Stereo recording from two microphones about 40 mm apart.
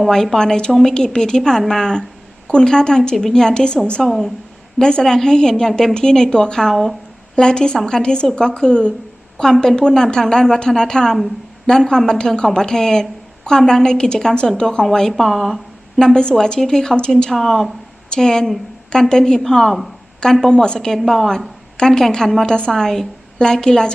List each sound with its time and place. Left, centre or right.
0.1 s a woman's voice: centre
15.1 s speech: centre
16.0 s a woman's voice: centre
20.4 s a woman's voice: left
22.4 s a woman's voice: left
22.7 s a woman's voice: centre